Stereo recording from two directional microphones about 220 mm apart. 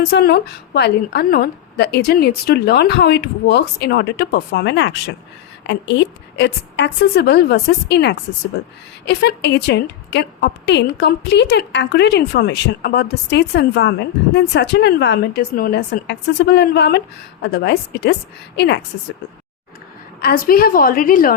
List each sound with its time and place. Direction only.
0.0 s a woman's voice: 50° left (ahead or behind)
20.2 s a woman's voice: 40° left (ahead or behind)